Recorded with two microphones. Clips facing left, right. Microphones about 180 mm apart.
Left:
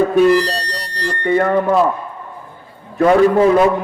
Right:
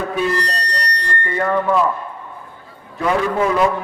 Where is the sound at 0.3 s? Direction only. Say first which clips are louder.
Left 8 dB; 90° left.